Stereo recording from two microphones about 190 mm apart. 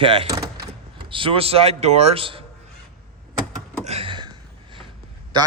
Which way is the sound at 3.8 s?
30° right (ahead or behind).